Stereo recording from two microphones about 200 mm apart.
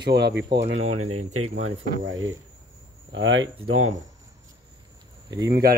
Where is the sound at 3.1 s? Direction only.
70° right (ahead or behind).